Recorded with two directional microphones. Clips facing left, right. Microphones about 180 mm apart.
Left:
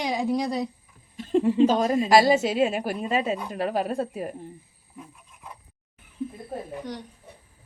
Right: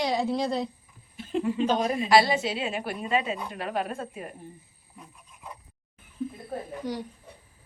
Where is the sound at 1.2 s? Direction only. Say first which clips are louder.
Left 7 dB; 35° left (ahead or behind).